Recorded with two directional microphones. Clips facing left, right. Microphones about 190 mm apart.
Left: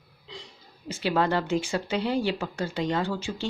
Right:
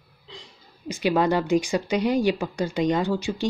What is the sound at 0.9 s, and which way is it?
Speech, 15° right (ahead or behind).